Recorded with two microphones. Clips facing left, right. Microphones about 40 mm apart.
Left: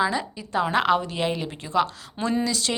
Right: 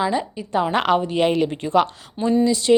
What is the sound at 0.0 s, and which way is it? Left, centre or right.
Speech, right.